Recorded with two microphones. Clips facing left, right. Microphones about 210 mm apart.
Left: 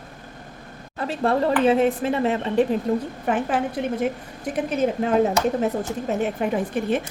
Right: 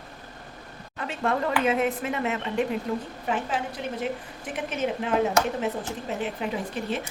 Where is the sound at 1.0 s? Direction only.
35° left (ahead or behind).